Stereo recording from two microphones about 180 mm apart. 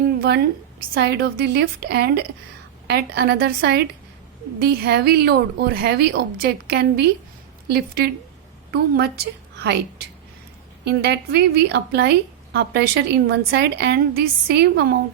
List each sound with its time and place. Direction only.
0.2 s a woman's voice: 60° right (ahead or behind)